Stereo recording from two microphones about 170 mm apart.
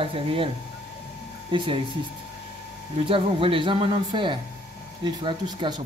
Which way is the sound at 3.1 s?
30° right (ahead or behind).